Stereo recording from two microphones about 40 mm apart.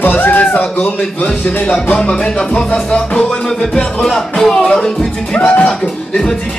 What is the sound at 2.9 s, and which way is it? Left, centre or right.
Music, centre.